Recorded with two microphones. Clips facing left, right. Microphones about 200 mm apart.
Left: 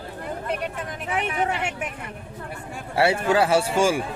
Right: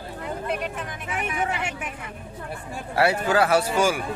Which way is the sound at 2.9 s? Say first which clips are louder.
Left 1 dB; 30° left (ahead or behind).